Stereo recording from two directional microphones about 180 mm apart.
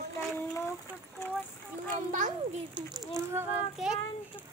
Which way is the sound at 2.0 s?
45° right (ahead or behind).